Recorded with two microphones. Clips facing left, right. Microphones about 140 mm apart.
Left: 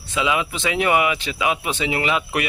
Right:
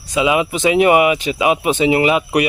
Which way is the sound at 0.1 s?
15° right (ahead or behind).